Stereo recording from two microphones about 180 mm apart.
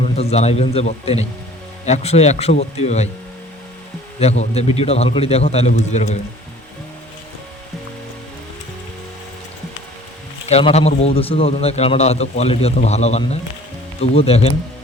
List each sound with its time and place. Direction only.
0.0 s a man's voice: 35° left (ahead or behind)
4.2 s a man's voice: 35° left (ahead or behind)
10.4 s a man's voice: 35° left (ahead or behind)